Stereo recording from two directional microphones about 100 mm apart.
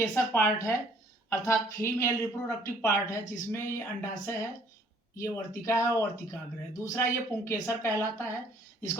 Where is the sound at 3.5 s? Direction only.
25° left (ahead or behind).